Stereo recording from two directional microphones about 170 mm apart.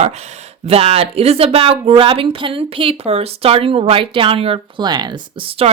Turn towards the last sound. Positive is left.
turn(degrees=-35)  # may be behind; listen again after turning